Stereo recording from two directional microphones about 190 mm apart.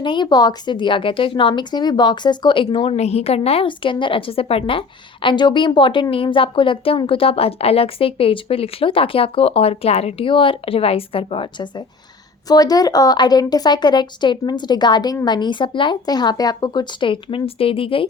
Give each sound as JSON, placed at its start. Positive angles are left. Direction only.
{"t": 0.0, "sound": "a woman's voice", "side_deg": 25}